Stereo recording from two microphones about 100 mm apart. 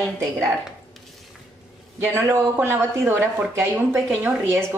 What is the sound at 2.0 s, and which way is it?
Speech, 25° right (ahead or behind).